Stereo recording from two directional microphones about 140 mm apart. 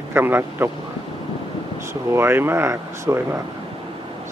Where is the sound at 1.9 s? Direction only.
20° right (ahead or behind).